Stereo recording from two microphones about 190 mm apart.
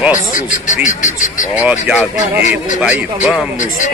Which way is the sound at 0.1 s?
40° left (ahead or behind).